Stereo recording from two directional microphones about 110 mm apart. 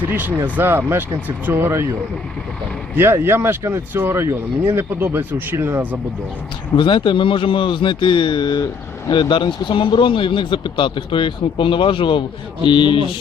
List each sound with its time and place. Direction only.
0.1 s speech: 20° right (ahead or behind)
3.0 s speech: 20° right (ahead or behind)
6.7 s speech: 50° left (ahead or behind)